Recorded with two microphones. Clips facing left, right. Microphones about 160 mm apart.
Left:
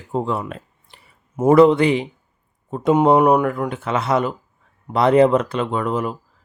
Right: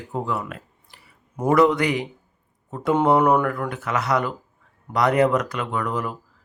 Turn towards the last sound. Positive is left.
turn(degrees=25)  # may be behind; listen again after turning